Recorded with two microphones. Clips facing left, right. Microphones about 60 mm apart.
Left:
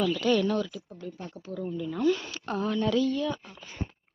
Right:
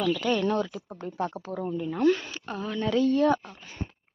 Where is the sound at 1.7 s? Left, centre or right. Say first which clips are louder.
Right 2 dB; right.